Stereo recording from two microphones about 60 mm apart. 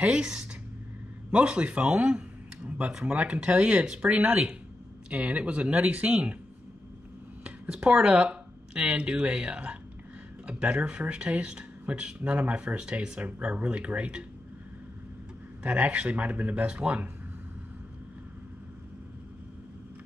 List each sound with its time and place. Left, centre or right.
0.0 s speech: centre
4.1 s speech: right
7.4 s speech: centre
15.6 s speech: right